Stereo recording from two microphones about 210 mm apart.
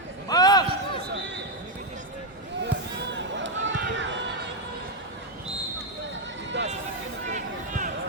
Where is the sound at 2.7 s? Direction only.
55° right (ahead or behind).